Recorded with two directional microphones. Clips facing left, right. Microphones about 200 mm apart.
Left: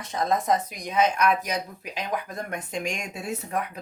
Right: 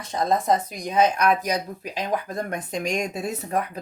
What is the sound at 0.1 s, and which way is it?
Speech, 30° right (ahead or behind).